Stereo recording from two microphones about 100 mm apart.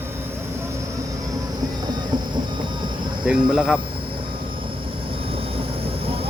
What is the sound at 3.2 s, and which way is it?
Speech, 10° right (ahead or behind).